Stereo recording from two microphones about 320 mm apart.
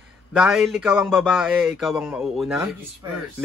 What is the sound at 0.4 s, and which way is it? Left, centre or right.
Speech, centre.